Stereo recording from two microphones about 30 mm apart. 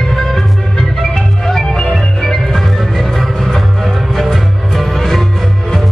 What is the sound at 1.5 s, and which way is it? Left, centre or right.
Music, centre.